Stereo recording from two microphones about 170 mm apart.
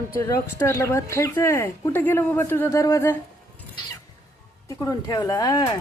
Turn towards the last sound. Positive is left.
turn(degrees=20)  # may be behind; listen again after turning